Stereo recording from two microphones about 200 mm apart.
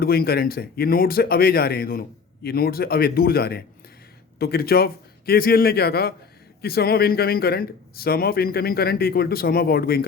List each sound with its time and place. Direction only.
0.0 s speech: 50° left (ahead or behind)